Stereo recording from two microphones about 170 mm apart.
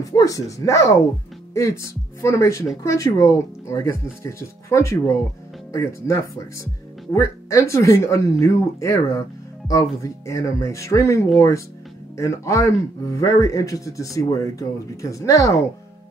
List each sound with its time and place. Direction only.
0.0 s a man's voice: 20° left (ahead or behind)